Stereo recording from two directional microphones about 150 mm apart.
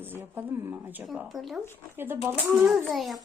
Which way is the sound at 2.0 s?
15° right (ahead or behind).